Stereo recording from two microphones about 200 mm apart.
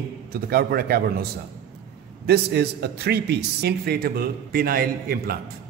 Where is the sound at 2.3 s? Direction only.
55° right (ahead or behind).